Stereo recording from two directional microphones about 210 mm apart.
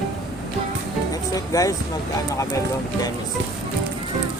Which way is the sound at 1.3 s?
15° left (ahead or behind).